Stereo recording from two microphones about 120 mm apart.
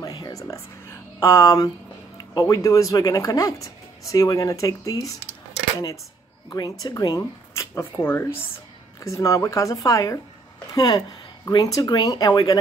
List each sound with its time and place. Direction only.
0.0 s a sound: 30° left (ahead or behind)
2.1 s speech: 30° left (ahead or behind)
6.5 s speech: 30° left (ahead or behind)